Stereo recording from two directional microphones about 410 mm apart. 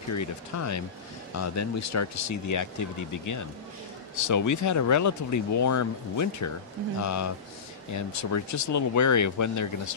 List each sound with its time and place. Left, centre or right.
0.1 s speech: left